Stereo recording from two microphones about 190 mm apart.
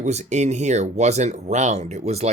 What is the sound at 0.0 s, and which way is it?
Speech, 35° right (ahead or behind).